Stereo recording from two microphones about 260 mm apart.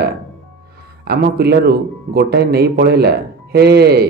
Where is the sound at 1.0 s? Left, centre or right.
Right.